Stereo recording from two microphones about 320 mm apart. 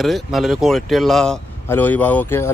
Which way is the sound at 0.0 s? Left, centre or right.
Centre.